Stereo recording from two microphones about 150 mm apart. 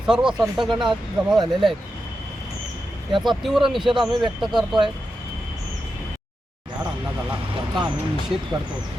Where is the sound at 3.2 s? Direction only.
Centre (ahead or behind).